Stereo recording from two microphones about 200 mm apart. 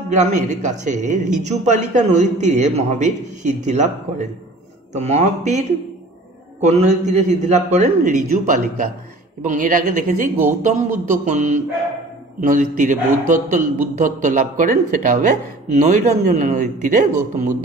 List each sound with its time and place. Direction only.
0.1 s a man's voice: 35° right (ahead or behind)